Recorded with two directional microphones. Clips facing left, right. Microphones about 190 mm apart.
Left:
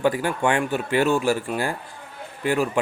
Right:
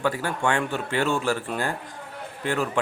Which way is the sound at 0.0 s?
15° left (ahead or behind).